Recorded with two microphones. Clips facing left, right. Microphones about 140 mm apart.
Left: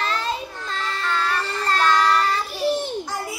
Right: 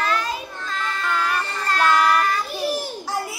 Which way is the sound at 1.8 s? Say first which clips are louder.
Right 1 dB; 5° right (ahead or behind).